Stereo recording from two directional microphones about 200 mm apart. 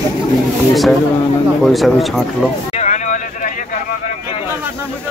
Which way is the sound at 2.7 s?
35° left (ahead or behind).